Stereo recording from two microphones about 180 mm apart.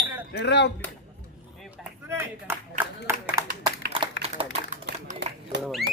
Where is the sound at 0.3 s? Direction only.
70° left (ahead or behind).